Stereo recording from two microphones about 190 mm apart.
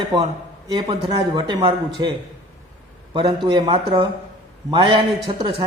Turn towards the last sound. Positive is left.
turn(degrees=-25)  # may be behind; listen again after turning